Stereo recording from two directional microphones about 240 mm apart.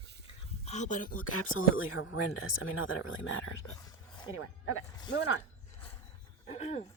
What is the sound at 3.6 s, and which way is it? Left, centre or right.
Speech, left.